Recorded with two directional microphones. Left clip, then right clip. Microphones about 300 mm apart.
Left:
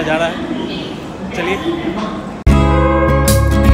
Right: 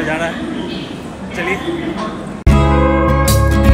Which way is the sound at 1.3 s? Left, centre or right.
Centre.